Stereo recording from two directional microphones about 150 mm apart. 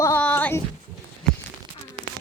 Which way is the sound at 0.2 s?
10° left (ahead or behind).